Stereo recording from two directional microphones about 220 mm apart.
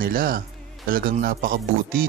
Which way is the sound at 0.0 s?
40° right (ahead or behind).